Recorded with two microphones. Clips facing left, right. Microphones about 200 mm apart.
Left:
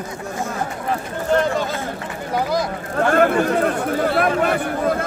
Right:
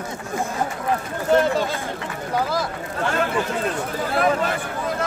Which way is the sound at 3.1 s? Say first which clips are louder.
Left 8 dB; 55° left (ahead or behind).